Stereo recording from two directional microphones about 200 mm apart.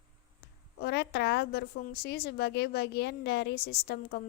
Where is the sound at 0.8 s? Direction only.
55° left (ahead or behind).